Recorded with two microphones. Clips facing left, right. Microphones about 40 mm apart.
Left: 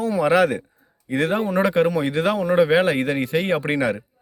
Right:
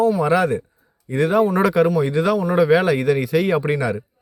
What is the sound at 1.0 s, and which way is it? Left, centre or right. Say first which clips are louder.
Speech: right 2 dB; left.